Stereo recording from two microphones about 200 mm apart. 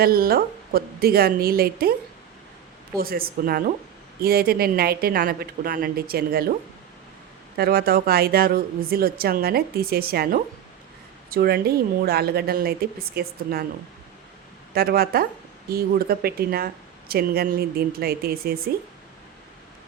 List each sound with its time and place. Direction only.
0.0 s speech: 50° right (ahead or behind)
3.0 s speech: 50° right (ahead or behind)
7.5 s speech: 50° right (ahead or behind)
14.7 s speech: 50° right (ahead or behind)